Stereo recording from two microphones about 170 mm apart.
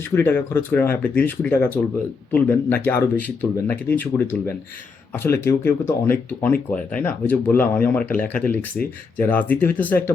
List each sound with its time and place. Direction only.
0.0 s speech: 15° left (ahead or behind)